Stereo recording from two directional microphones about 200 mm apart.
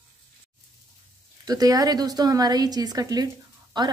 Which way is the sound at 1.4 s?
20° right (ahead or behind).